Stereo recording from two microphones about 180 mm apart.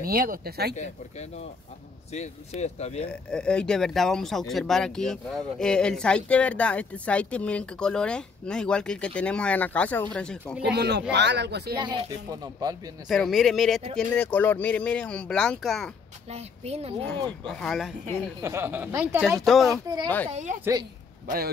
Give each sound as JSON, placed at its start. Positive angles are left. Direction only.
{"t": 0.0, "sound": "speech", "side_deg": -55}
{"t": 2.1, "sound": "speech", "side_deg": 40}
{"t": 3.1, "sound": "speech", "side_deg": 5}
{"t": 10.6, "sound": "speech", "side_deg": -70}
{"t": 11.7, "sound": "speech", "side_deg": -25}
{"t": 13.1, "sound": "speech", "side_deg": 0}
{"t": 16.3, "sound": "a woman's voice", "side_deg": -35}
{"t": 17.0, "sound": "speech", "side_deg": 5}
{"t": 18.4, "sound": "speech", "side_deg": -15}
{"t": 19.2, "sound": "speech", "side_deg": 0}
{"t": 20.2, "sound": "a woman's voice", "side_deg": -40}